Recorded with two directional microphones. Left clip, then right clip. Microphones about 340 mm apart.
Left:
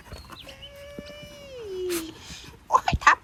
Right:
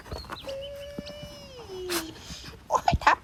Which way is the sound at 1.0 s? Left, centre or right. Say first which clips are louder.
Right 1 dB; right.